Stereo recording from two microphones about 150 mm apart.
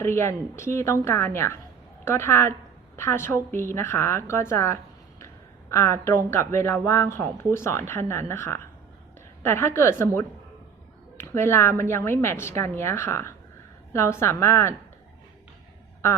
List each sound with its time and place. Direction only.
0.0 s a woman's voice: 15° left (ahead or behind)